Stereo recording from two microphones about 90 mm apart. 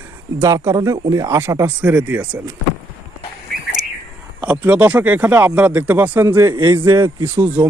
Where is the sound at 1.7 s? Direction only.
20° right (ahead or behind).